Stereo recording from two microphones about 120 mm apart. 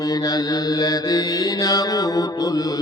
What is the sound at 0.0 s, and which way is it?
Mantra, 30° left (ahead or behind).